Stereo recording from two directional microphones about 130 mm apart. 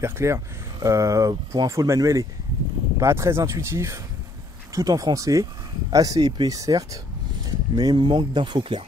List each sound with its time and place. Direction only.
0.0 s speech: 20° right (ahead or behind); by 8.8 s 40° right (ahead or behind)